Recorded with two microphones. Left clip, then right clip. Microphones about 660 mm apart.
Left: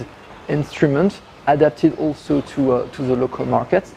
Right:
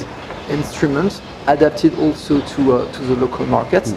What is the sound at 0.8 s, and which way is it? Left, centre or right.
Speech, left.